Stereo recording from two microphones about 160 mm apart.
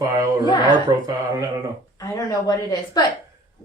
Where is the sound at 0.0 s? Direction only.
20° right (ahead or behind).